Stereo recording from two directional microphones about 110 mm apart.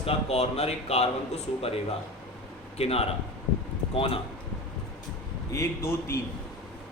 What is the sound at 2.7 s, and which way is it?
A man's voice, 65° left (ahead or behind).